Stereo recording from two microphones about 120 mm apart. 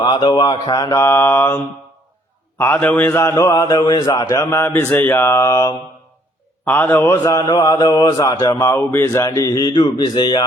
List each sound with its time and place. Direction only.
0.0 s mantra: 40° left (ahead or behind); by 1.6 s 20° left (ahead or behind)
2.7 s mantra: 10° left (ahead or behind); by 4.4 s 30° left (ahead or behind)
4.4 s mantra: 20° left (ahead or behind)
6.7 s speech: 15° left (ahead or behind); by 10.4 s 40° left (ahead or behind)